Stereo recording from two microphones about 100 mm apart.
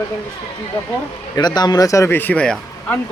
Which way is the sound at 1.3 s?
45° left (ahead or behind).